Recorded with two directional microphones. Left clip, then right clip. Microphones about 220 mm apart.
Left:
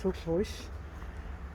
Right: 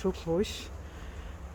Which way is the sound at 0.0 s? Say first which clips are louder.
Right 1 dB; 15° right (ahead or behind).